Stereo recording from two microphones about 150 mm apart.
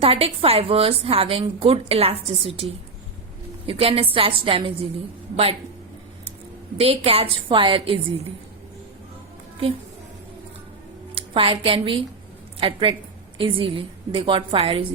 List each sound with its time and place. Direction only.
0.0 s a woman's voice: 40° right (ahead or behind)
3.7 s a woman's voice: 40° right (ahead or behind)
6.7 s a woman's voice: 40° right (ahead or behind)
11.1 s a woman's voice: 40° right (ahead or behind)